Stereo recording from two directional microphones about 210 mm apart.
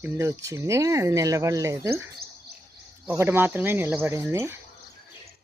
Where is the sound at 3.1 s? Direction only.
10° right (ahead or behind).